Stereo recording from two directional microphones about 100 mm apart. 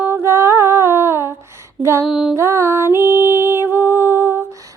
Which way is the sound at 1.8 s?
25° right (ahead or behind).